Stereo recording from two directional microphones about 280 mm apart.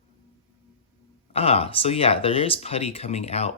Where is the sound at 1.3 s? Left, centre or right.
Left.